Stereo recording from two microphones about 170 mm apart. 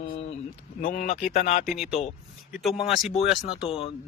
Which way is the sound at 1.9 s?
35° left (ahead or behind).